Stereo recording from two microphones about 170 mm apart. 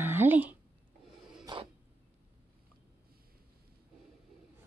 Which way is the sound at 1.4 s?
25° right (ahead or behind).